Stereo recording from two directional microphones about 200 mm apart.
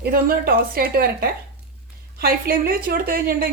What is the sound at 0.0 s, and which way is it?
A woman's voice, 50° right (ahead or behind).